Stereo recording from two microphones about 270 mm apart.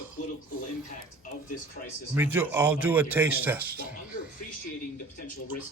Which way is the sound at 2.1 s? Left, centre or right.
Centre.